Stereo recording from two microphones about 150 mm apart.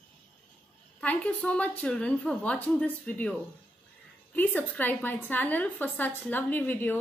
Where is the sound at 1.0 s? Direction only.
10° left (ahead or behind).